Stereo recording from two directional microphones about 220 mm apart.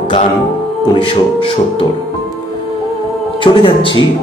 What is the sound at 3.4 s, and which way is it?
Speech, 25° left (ahead or behind).